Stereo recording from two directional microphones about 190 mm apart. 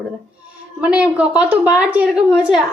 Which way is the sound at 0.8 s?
5° right (ahead or behind).